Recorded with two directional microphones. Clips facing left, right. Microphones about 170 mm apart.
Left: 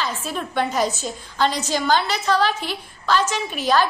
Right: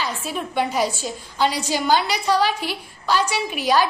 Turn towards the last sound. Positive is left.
turn(degrees=-10)  # may be behind; listen again after turning